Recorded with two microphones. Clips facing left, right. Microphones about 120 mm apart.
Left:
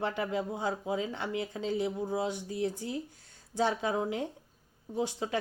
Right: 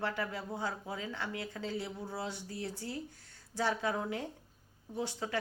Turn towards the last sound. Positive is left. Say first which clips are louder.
# left 4 dB
turn(degrees=15)  # may be behind; listen again after turning